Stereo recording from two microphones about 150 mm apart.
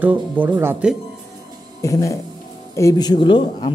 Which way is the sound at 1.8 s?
20° left (ahead or behind).